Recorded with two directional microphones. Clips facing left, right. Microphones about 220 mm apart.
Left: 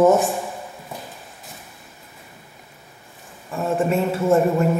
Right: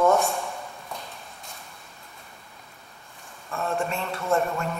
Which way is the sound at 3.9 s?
5° left (ahead or behind).